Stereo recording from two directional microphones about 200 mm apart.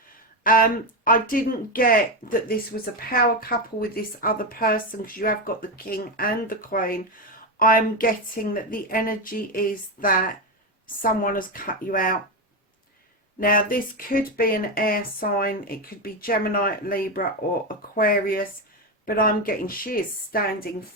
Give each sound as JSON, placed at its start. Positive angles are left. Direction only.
{"t": 0.4, "sound": "speech", "side_deg": 45}
{"t": 13.4, "sound": "speech", "side_deg": 45}